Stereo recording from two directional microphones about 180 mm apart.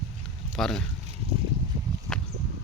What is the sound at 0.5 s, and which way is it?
Speech, centre (ahead or behind).